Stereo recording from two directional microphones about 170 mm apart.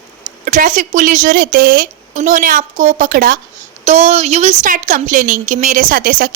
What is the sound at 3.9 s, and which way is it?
Speech, 40° right (ahead or behind).